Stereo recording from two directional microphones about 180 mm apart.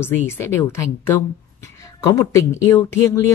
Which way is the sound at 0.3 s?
15° left (ahead or behind).